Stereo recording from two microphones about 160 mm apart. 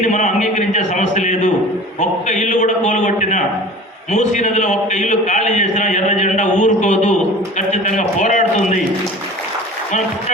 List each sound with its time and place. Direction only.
0.0 s a man's voice: 50° left (ahead or behind)